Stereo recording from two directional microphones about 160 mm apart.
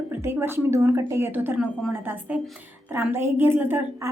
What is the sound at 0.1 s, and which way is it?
A woman's voice, 15° right (ahead or behind).